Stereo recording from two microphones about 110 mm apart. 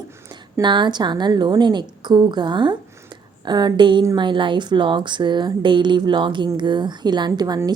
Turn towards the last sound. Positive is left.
turn(degrees=-35)  # may be behind; listen again after turning